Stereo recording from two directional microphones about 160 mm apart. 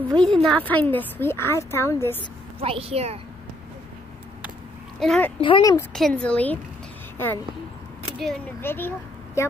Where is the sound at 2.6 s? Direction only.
35° right (ahead or behind).